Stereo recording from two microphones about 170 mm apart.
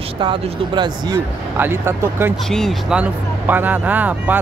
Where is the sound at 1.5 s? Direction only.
15° right (ahead or behind).